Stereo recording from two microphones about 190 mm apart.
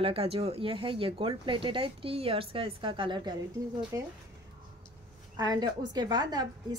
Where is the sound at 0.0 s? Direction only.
30° right (ahead or behind); by 4.1 s 15° right (ahead or behind).